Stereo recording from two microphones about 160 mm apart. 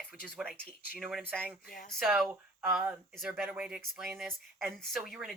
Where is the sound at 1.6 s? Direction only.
65° left (ahead or behind).